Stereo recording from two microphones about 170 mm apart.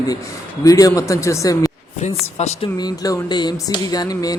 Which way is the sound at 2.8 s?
25° left (ahead or behind).